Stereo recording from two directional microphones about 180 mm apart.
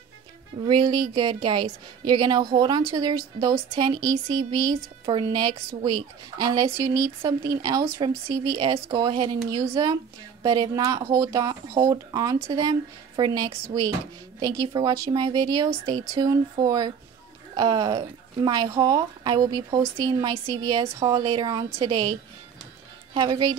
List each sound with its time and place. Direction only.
0.6 s a woman's voice: 25° right (ahead or behind)
23.1 s a woman's voice: 25° right (ahead or behind)